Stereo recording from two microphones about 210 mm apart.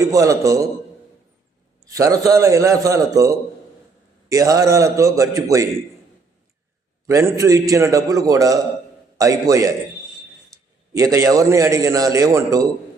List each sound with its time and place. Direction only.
0.0 s a man's voice: 15° right (ahead or behind)
1.8 s a man's voice: 15° right (ahead or behind)
7.1 s a man's voice: 15° right (ahead or behind)
10.9 s a man's voice: 15° right (ahead or behind)